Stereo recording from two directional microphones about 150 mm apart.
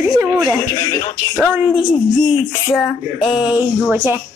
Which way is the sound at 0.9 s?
20° left (ahead or behind).